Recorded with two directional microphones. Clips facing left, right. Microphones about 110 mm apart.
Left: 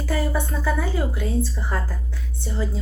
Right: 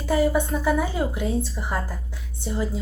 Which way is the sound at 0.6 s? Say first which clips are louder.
Right 2 dB; 15° right (ahead or behind).